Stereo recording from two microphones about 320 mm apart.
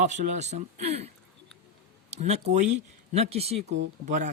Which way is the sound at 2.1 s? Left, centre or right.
Centre.